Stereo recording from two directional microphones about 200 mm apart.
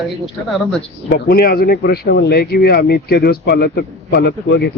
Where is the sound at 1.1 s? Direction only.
50° left (ahead or behind).